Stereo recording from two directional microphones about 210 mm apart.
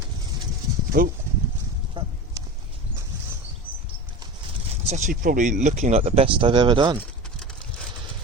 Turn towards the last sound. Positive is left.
turn(degrees=-20)  # may be behind; listen again after turning